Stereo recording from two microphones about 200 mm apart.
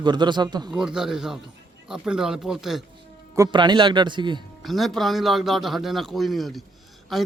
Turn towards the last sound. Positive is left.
turn(degrees=0)  # may be behind; listen again after turning